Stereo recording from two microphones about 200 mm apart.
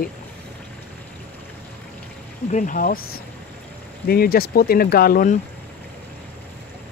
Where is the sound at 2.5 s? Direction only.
40° left (ahead or behind).